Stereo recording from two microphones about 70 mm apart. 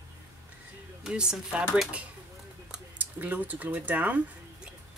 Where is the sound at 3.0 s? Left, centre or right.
Right.